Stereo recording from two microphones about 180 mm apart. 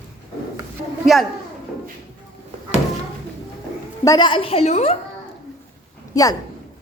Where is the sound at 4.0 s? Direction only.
20° left (ahead or behind).